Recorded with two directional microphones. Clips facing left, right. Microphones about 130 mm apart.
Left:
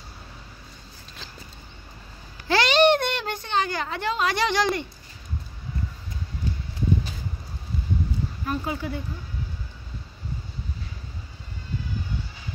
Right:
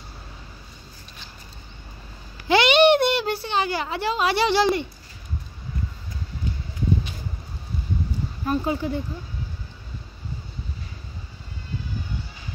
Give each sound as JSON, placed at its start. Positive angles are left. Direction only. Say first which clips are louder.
{"t": 2.4, "sound": "a sound", "louder": "right 3 dB", "side_deg": -5}
{"t": 3.4, "sound": "a woman's voice", "louder": "right 1 dB", "side_deg": -10}
{"t": 4.4, "sound": "speech", "louder": "right 5 dB", "side_deg": -30}
{"t": 8.5, "sound": "speech", "louder": "right 6 dB", "side_deg": -30}